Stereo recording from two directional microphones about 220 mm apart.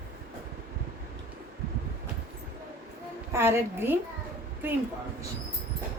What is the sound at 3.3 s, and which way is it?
A woman's voice, 10° right (ahead or behind).